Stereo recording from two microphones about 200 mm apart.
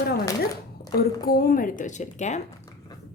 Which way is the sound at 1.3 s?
45° left (ahead or behind).